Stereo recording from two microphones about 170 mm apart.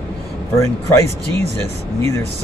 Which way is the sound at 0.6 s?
15° left (ahead or behind).